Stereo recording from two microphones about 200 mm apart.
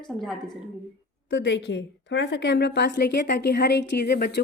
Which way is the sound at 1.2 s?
65° left (ahead or behind).